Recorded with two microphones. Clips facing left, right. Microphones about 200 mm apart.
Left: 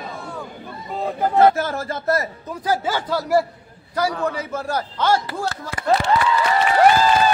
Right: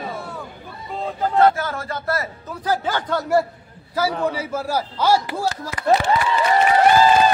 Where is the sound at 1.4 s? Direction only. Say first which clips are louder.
Left 1 dB; 25° left (ahead or behind).